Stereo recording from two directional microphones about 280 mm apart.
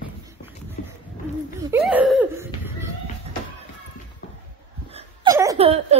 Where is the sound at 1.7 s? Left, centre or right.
Centre.